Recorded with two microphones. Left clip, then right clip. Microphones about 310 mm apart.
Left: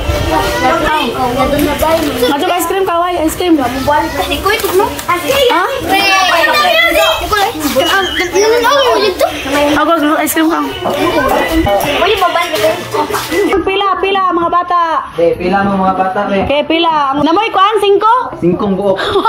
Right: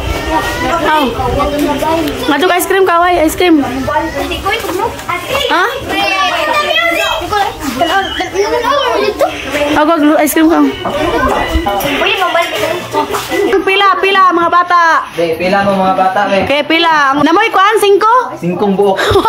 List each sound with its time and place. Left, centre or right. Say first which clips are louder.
2.4 s a woman's voice: right 3 dB; centre
8.4 s a woman's voice: left 3 dB; centre
13.7 s a woman's voice: right 3 dB; centre
16.5 s a woman's voice: right 1 dB; centre